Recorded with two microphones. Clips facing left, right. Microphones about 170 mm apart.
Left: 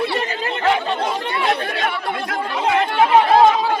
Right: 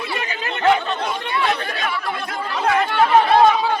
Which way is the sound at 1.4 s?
30° left (ahead or behind).